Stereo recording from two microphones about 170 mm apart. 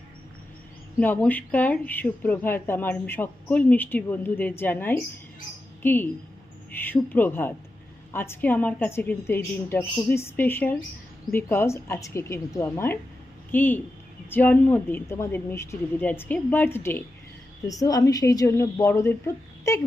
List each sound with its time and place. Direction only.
0.9 s a woman's voice: 10° left (ahead or behind)